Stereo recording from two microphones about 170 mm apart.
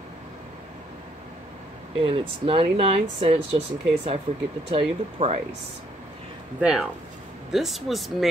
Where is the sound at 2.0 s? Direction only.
30° right (ahead or behind).